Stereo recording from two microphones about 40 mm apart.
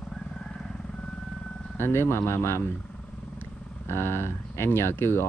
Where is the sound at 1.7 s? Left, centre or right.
Left.